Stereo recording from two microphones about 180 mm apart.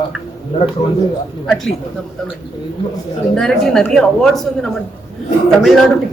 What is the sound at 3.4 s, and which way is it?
Speech, centre (ahead or behind).